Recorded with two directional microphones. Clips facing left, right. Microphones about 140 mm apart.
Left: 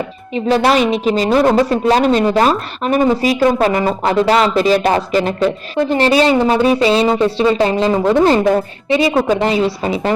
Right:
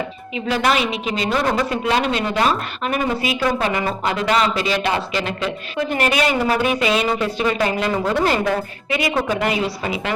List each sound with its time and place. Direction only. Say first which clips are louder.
0.3 s a woman's voice: left 7 dB; 35° left (ahead or behind)
5.9 s a woman's voice: left 7 dB; 30° left (ahead or behind)